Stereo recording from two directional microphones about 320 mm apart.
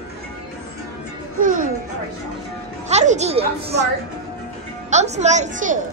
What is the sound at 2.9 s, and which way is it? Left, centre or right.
A woman's voice, right.